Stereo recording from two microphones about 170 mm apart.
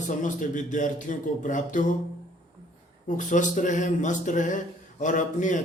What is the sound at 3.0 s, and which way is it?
A man's voice, 50° left (ahead or behind).